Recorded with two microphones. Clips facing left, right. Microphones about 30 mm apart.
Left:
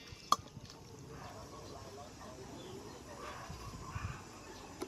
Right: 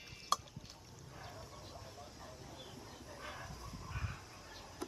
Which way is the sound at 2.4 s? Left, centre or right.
Right.